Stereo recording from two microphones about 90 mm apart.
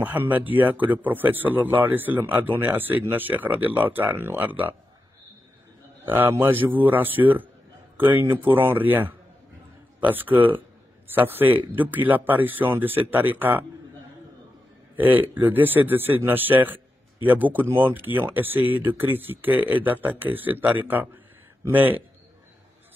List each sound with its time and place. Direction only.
0.0 s a man's voice: 20° right (ahead or behind)
6.0 s a man's voice: 20° right (ahead or behind)
15.0 s a man's voice: 20° right (ahead or behind)